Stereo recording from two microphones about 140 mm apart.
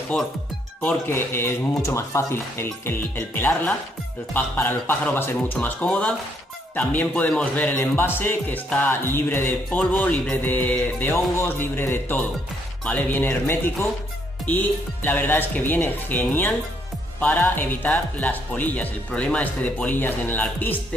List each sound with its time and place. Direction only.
0.8 s a man's voice: 15° left (ahead or behind)
15.0 s a man's voice: 15° left (ahead or behind)